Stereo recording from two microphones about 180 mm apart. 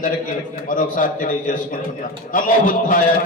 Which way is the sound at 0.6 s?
50° left (ahead or behind).